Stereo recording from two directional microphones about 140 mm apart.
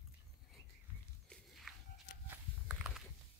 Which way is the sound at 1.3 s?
Centre (ahead or behind).